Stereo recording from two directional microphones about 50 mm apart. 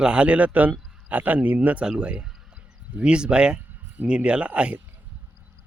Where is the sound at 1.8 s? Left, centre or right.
Centre.